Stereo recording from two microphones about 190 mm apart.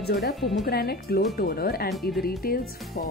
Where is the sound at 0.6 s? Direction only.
55° left (ahead or behind).